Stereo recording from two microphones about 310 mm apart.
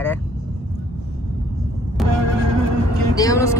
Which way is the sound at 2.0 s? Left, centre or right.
Centre.